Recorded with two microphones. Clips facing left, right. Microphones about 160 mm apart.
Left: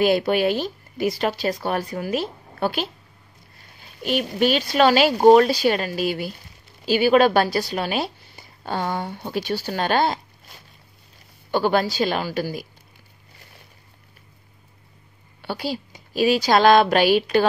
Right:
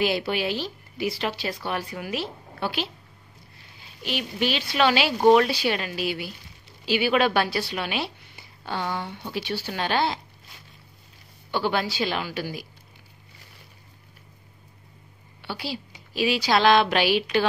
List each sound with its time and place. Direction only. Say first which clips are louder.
0.0 s speech: left 6 dB; 50° left (ahead or behind)
11.5 s speech: left 5 dB; 45° left (ahead or behind)
15.4 s speech: left 5 dB; 45° left (ahead or behind)